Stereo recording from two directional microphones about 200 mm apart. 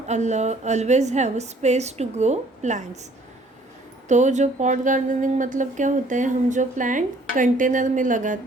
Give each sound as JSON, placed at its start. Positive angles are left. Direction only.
{"t": 0.1, "sound": "speech", "side_deg": -35}
{"t": 4.1, "sound": "speech", "side_deg": -35}